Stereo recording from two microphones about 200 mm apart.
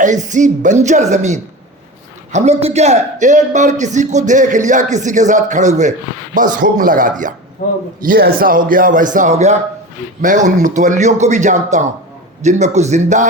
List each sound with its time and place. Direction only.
0.0 s a man's voice: 40° right (ahead or behind)
7.6 s a man's voice: 45° left (ahead or behind)
8.0 s a man's voice: 45° right (ahead or behind)